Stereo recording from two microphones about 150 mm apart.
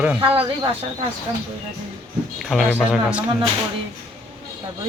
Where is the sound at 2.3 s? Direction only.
Centre (ahead or behind).